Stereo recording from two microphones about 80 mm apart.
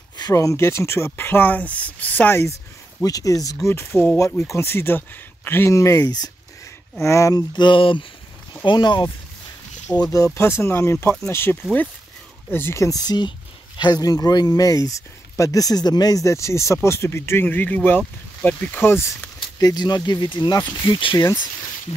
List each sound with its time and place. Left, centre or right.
0.3 s speech: left
0.6 s speech: left
3.0 s speech: left
3.6 s speech: left
5.7 s speech: left
6.0 s speech: left
7.0 s speech: left
7.5 s speech: left
8.6 s speech: left
10.1 s speech: left
13.0 s speech: left; by 18.8 s centre
18.8 s speech: left
19.6 s speech: left
20.8 s speech: left